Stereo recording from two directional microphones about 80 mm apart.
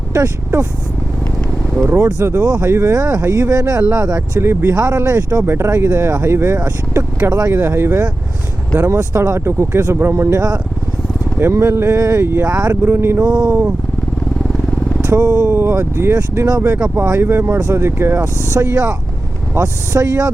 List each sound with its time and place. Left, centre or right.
0.1 s speech: right
1.8 s speech: right
4.4 s speech: right
4.7 s speech: right
7.3 s speech: right
11.3 s speech: right
13.2 s speech: right
13.5 s speech: right
14.7 s vehicle: centre
15.0 s speech: right
15.3 s speech: right
16.5 s speech: right
17.2 s speech: right